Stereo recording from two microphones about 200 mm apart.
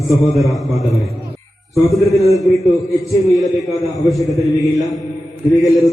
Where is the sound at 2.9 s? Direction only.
15° left (ahead or behind).